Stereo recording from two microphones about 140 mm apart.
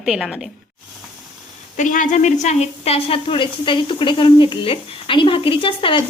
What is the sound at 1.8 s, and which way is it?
A woman's voice, 65° left (ahead or behind).